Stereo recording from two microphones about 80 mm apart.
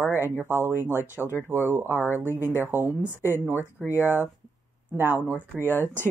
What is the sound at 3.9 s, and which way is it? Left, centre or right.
Speech, right.